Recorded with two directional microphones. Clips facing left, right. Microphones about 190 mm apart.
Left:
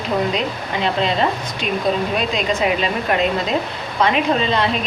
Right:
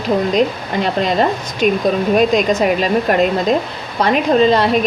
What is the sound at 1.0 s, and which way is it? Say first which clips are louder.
Speech: right 3 dB; 45° right (ahead or behind).